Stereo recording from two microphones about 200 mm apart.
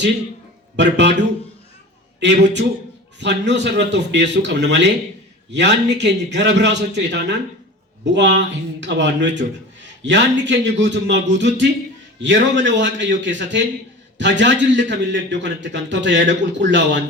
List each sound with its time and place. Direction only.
0.8 s a man's voice: 60° right (ahead or behind)
2.2 s a man's voice: 60° right (ahead or behind)